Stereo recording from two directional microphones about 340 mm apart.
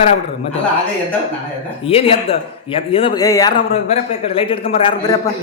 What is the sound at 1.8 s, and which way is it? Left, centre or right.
Speech, centre.